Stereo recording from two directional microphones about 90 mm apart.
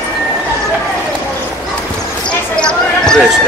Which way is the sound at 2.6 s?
10° left (ahead or behind).